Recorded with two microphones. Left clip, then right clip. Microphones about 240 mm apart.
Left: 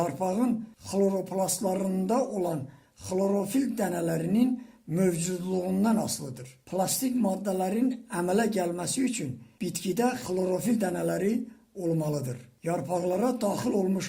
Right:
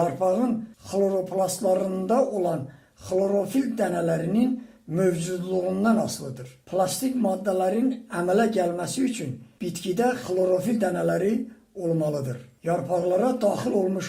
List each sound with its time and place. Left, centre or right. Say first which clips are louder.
0.0 s speech: right 5 dB; left